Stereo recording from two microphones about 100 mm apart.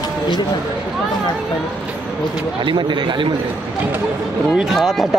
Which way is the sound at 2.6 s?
50° right (ahead or behind).